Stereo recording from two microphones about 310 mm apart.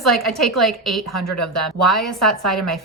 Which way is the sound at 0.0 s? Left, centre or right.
Centre.